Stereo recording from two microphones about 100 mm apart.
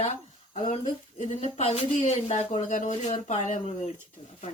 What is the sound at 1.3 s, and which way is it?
Speech, 90° left.